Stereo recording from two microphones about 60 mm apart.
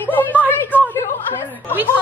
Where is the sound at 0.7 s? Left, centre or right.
Right.